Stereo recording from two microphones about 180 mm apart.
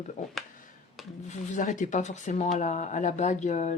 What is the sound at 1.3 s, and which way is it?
Speech, 45° left (ahead or behind).